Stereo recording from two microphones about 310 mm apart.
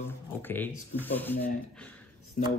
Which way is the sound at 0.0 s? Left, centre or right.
Centre.